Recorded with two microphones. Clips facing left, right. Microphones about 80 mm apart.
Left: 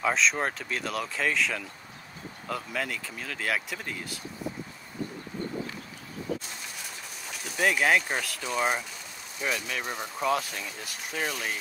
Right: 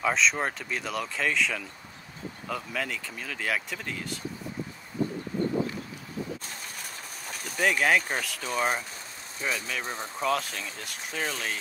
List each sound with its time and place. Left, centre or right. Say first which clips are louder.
0.0 s speech: even; centre
6.8 s train: right 1 dB; right
7.5 s speech: even; centre